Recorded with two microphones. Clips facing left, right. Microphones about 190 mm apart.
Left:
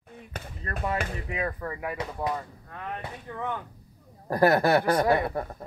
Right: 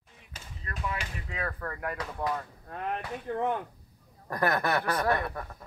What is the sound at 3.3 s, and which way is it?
Speech, 35° right (ahead or behind).